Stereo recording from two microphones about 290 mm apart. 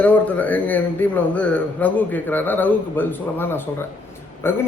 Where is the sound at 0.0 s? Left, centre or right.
Centre.